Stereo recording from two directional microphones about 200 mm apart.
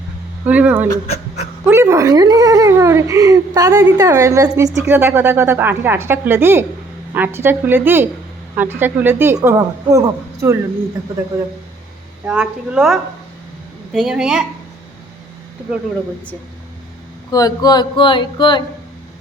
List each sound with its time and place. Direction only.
0.4 s speech: 10° right (ahead or behind)
1.0 s speech: 30° left (ahead or behind)
1.6 s speech: 10° right (ahead or behind)
12.2 s a woman's voice: 5° right (ahead or behind)
17.3 s speech: 20° left (ahead or behind)